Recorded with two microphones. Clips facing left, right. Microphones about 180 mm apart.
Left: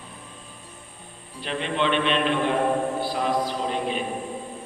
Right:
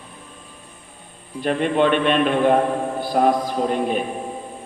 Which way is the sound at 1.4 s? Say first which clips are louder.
Right 8 dB; 50° right (ahead or behind).